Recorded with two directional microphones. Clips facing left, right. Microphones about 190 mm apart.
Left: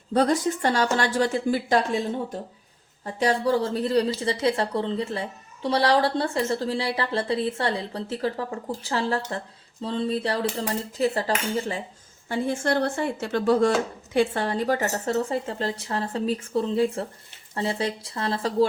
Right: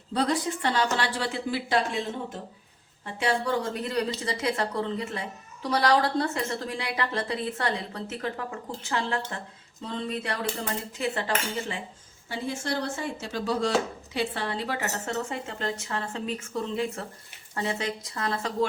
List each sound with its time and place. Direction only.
0.1 s a woman's voice: 45° left (ahead or behind)
3.0 s speech: 40° left (ahead or behind)
12.3 s speech: 55° left (ahead or behind); by 18.7 s 30° left (ahead or behind)